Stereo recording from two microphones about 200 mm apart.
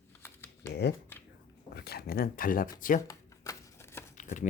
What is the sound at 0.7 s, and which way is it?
Speech, 55° left (ahead or behind).